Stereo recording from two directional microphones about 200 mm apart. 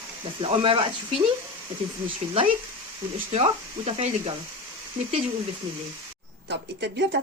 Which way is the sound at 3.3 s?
30° right (ahead or behind).